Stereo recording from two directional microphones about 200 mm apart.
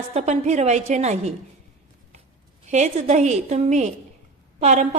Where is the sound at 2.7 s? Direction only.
35° right (ahead or behind).